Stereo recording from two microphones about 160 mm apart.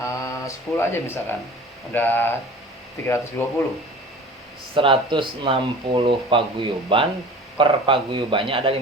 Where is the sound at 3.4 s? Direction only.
10° left (ahead or behind).